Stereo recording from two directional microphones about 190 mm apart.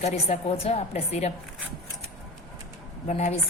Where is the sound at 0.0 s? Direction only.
35° left (ahead or behind).